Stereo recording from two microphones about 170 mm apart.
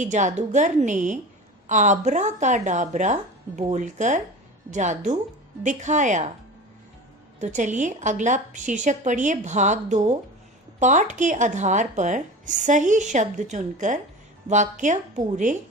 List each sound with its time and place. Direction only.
0.0 s speech: 45° right (ahead or behind)
7.3 s speech: 45° right (ahead or behind)